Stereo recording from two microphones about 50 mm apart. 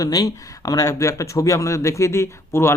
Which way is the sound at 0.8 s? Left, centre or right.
Left.